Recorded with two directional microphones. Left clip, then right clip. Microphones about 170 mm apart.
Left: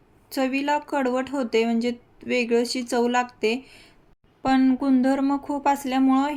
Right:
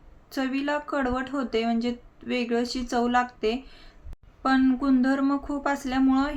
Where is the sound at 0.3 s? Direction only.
20° left (ahead or behind).